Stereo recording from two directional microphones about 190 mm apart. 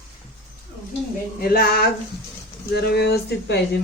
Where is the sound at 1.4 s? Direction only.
55° left (ahead or behind).